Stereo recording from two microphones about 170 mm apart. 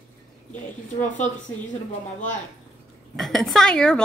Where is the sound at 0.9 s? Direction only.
45° left (ahead or behind).